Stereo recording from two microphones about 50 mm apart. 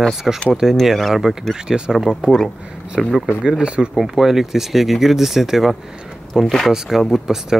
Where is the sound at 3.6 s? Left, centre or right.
Right.